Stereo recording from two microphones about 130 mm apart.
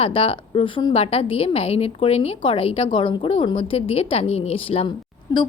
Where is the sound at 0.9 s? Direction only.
50° left (ahead or behind).